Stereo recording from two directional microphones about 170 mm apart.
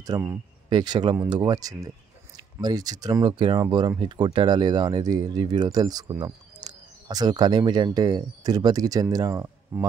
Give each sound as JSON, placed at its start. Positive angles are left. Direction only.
{"t": 0.1, "sound": "speech", "side_deg": -25}